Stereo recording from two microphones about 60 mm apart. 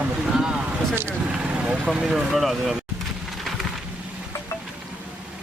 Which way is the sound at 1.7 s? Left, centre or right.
Centre.